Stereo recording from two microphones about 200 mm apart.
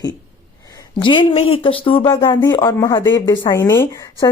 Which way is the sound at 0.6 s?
20° left (ahead or behind).